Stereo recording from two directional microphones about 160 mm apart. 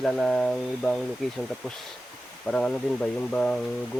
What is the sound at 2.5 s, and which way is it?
Speech, 5° left (ahead or behind).